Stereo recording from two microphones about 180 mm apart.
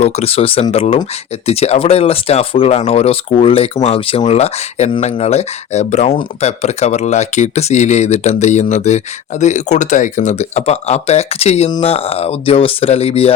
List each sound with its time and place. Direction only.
0.0 s speech: 35° left (ahead or behind)